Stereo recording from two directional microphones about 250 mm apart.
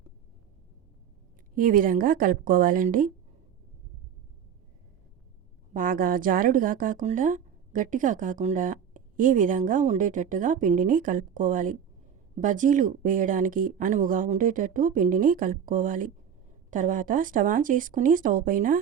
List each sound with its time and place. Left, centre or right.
1.5 s speech: right
5.7 s speech: right